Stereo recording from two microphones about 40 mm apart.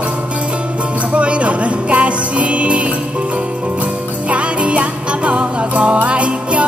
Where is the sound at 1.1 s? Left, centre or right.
Right.